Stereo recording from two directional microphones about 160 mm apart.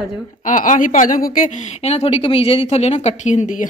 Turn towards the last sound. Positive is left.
turn(degrees=50)  # may be behind; listen again after turning